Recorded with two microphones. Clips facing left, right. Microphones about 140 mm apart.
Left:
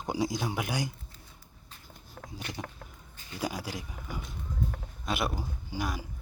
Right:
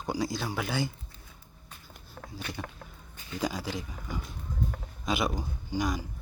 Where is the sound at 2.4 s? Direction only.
20° left (ahead or behind).